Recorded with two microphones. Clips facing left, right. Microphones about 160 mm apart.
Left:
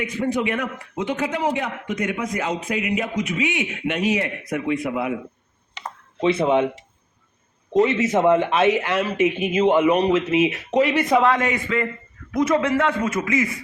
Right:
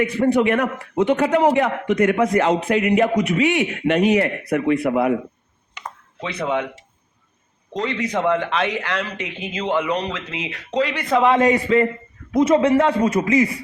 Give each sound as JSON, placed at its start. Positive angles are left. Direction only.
{"t": 0.0, "sound": "a man's voice", "side_deg": -60}
{"t": 6.1, "sound": "speech", "side_deg": 20}
{"t": 7.7, "sound": "speech", "side_deg": 20}
{"t": 11.3, "sound": "a man's voice", "side_deg": -35}